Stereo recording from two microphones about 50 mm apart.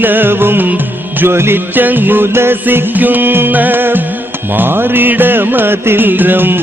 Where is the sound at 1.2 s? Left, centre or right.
Right.